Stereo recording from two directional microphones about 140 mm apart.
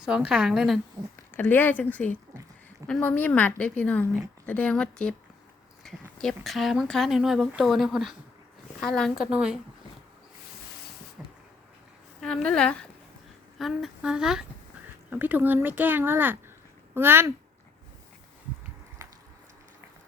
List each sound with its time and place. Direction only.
0.0 s speech: 5° right (ahead or behind)
1.4 s speech: 15° left (ahead or behind); by 9.6 s 5° right (ahead or behind)
11.2 s vehicle: 10° right (ahead or behind)
12.2 s a woman's voice: 5° left (ahead or behind); by 17.3 s 15° right (ahead or behind)